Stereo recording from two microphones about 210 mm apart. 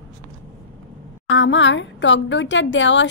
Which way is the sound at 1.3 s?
60° left (ahead or behind).